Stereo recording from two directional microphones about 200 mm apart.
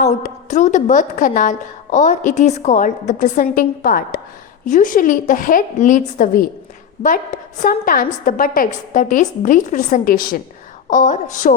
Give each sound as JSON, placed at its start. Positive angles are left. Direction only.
{"t": 0.0, "sound": "a woman's voice", "side_deg": 35}
{"t": 7.6, "sound": "a woman's voice", "side_deg": 45}